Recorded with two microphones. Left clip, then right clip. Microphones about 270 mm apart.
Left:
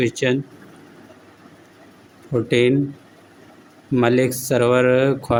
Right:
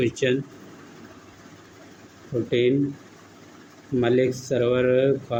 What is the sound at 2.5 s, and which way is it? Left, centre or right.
Speech, left.